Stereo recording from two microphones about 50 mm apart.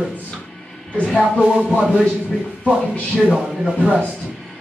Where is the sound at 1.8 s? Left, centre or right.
Centre.